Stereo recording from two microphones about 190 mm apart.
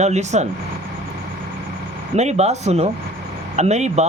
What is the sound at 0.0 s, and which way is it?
Speech, 35° right (ahead or behind).